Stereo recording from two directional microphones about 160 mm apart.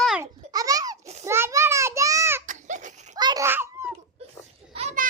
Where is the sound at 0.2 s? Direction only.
20° right (ahead or behind).